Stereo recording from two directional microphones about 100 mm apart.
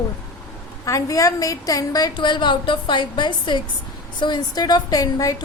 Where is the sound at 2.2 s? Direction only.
50° left (ahead or behind); by 5.4 s 35° left (ahead or behind).